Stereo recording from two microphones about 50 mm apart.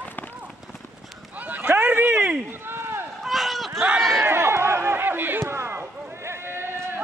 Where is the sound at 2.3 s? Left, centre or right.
Right.